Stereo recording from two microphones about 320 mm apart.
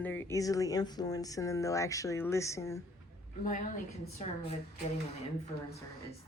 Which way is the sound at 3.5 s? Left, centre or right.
Left.